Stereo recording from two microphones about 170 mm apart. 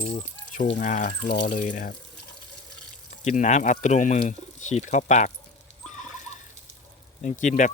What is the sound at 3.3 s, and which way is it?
Speech, 45° left (ahead or behind).